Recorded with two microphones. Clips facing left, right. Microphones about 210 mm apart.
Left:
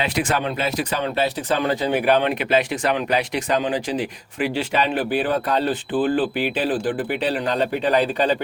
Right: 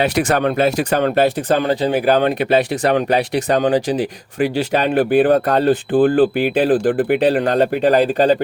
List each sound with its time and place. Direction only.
0.0 s speech: 45° right (ahead or behind)
0.3 s speech: 55° right (ahead or behind)
1.6 s speech: 30° right (ahead or behind)